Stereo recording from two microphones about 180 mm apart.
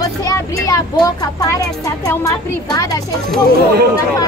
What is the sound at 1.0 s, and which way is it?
Speech, 20° left (ahead or behind).